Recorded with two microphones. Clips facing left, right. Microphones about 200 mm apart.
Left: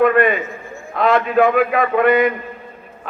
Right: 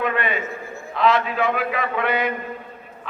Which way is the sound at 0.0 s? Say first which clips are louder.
Left 9 dB; 50° left (ahead or behind).